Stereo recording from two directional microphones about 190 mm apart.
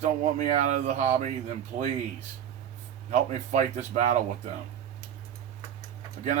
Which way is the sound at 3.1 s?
40° right (ahead or behind).